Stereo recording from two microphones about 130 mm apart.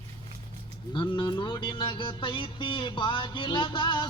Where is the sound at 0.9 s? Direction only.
35° left (ahead or behind).